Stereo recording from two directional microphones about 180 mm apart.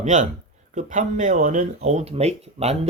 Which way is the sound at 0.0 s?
45° right (ahead or behind).